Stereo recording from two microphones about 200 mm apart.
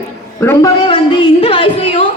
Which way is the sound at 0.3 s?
10° left (ahead or behind).